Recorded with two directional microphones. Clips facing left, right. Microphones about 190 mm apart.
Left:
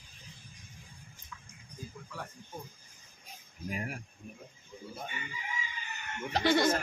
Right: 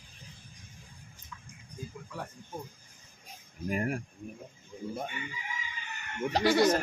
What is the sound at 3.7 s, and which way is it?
Speech, 50° right (ahead or behind).